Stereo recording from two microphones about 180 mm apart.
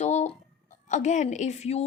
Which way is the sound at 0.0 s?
40° left (ahead or behind).